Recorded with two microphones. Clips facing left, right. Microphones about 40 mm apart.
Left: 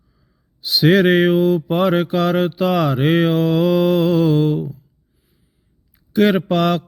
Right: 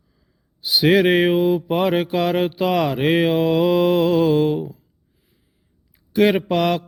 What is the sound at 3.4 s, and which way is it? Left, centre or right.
Mantra, centre.